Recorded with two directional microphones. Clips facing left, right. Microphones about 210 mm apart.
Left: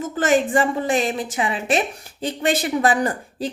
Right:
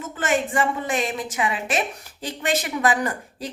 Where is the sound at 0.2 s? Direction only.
35° left (ahead or behind).